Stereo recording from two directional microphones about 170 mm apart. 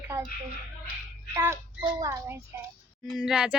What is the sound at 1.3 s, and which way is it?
Squawk, 15° right (ahead or behind).